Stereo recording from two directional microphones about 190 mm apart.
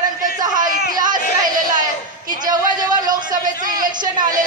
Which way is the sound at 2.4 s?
20° right (ahead or behind).